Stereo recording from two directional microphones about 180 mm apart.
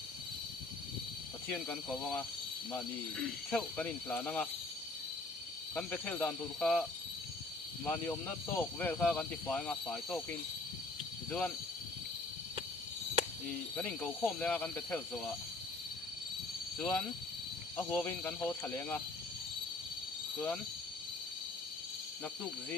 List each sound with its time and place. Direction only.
1.5 s speech: 10° left (ahead or behind)
5.8 s speech: 5° left (ahead or behind)
11.2 s speech: 10° left (ahead or behind)
13.7 s speech: 5° left (ahead or behind)
16.7 s speech: 10° left (ahead or behind)
22.2 s speech: 10° left (ahead or behind)